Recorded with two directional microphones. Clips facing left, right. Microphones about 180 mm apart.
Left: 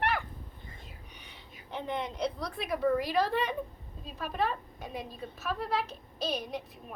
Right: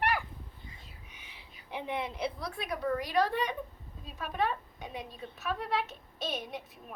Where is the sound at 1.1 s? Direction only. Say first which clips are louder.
Left 3 dB; 5° right (ahead or behind).